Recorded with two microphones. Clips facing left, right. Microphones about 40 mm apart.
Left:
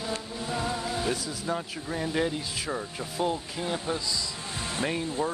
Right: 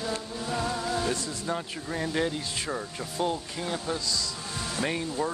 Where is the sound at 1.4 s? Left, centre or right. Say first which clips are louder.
Left 1 dB; centre.